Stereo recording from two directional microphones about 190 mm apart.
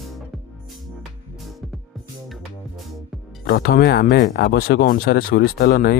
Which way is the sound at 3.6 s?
55° left (ahead or behind).